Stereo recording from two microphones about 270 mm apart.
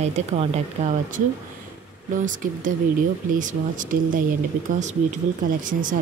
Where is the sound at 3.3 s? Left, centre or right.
Right.